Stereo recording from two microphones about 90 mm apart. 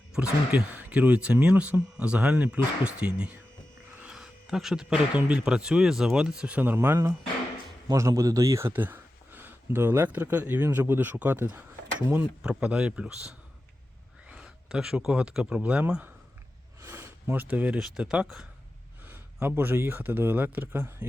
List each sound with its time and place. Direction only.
0.1 s speech: 10° right (ahead or behind)
6.7 s speech: 30° right (ahead or behind)
12.4 s speech: 10° right (ahead or behind)
16.8 s a sound: 25° right (ahead or behind)
17.7 s speech: 5° right (ahead or behind)
19.0 s speech: 25° right (ahead or behind)